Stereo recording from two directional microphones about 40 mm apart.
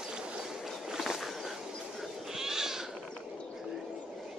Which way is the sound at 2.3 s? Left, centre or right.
Centre.